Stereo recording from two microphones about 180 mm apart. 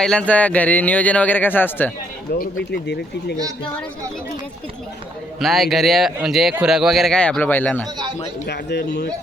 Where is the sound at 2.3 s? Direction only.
60° left (ahead or behind).